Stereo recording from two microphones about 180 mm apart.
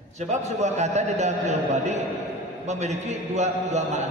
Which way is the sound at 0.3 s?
40° right (ahead or behind).